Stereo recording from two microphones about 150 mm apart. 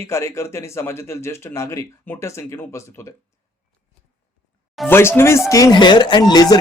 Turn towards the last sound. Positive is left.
turn(degrees=25)  # may be behind; listen again after turning